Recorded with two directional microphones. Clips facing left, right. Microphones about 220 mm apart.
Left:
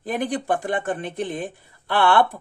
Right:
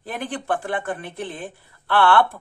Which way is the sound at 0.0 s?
15° left (ahead or behind).